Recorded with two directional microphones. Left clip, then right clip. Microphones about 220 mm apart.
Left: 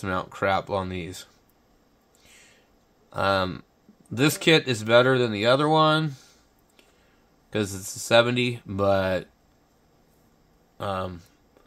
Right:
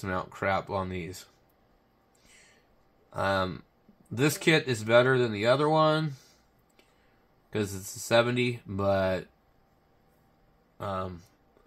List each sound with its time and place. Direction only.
0.0 s speech: 30° left (ahead or behind)
3.1 s speech: 30° left (ahead or behind)
7.4 s speech: 30° left (ahead or behind)
10.8 s speech: 35° left (ahead or behind)